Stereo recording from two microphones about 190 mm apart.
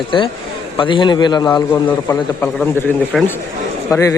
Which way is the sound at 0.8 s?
25° left (ahead or behind).